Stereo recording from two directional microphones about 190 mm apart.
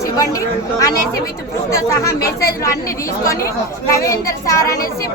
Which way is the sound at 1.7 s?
15° left (ahead or behind).